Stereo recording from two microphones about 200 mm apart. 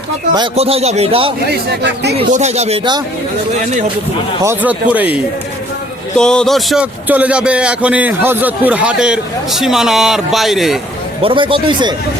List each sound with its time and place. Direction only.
0.3 s a man's voice: 25° right (ahead or behind)
1.5 s speech: 55° right (ahead or behind)
2.1 s speech: 35° right (ahead or behind)
4.4 s speech: 10° right (ahead or behind)
6.1 s a man's voice: 5° left (ahead or behind)
11.2 s a man's voice: 25° right (ahead or behind)